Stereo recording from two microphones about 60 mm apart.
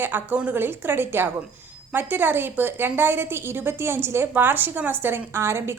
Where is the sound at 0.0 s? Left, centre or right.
Right.